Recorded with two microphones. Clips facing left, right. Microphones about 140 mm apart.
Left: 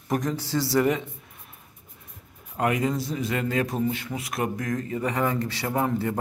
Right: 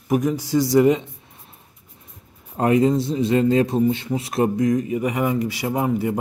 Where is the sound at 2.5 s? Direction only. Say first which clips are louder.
Right 7 dB; 30° right (ahead or behind).